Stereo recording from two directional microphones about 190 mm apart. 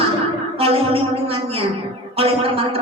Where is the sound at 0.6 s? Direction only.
30° right (ahead or behind).